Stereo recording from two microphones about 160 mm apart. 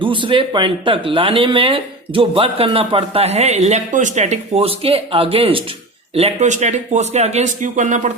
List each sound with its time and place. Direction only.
0.0 s a man's voice: 30° right (ahead or behind); by 8.1 s 50° right (ahead or behind)